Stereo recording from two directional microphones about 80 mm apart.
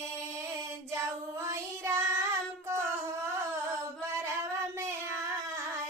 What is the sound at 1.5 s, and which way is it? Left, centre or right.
Child singing, right.